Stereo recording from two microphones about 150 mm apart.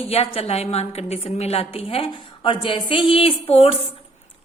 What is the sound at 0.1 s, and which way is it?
A woman's voice, 45° left (ahead or behind).